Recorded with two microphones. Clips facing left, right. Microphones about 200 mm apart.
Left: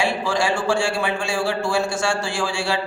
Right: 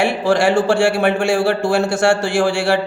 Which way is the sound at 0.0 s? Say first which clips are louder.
Right 7 dB; 65° right (ahead or behind).